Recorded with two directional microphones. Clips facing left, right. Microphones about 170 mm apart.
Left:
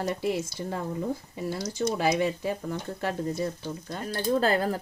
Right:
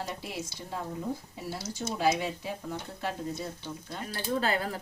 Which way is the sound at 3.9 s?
40° left (ahead or behind).